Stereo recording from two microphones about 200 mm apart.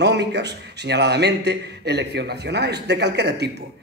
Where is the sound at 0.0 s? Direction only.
55° right (ahead or behind).